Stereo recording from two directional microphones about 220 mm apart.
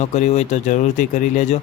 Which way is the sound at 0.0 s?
30° left (ahead or behind).